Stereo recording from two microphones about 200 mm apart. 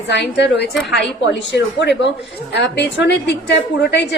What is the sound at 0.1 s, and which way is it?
A woman's voice, 60° left (ahead or behind).